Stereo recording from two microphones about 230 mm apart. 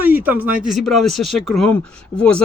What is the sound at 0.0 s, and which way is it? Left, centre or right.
Speech, centre.